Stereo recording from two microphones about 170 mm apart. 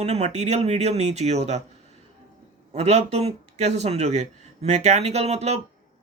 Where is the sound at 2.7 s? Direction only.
40° right (ahead or behind).